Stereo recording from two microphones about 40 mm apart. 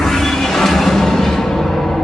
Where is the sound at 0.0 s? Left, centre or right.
Centre.